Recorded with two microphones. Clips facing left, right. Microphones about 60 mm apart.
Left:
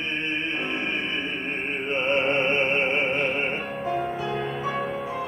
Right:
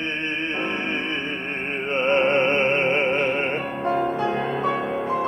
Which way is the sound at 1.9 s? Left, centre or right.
Right.